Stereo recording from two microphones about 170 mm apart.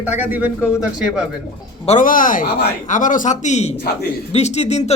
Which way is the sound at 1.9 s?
50° left (ahead or behind).